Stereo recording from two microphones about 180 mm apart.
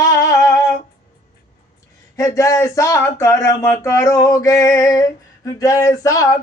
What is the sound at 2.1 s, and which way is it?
Speech, 20° left (ahead or behind).